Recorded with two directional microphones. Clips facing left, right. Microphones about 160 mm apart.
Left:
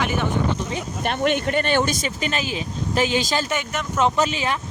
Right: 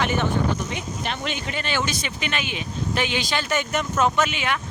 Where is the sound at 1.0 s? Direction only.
55° left (ahead or behind).